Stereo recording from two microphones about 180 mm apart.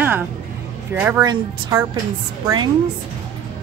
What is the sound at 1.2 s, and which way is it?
Speech, 20° right (ahead or behind).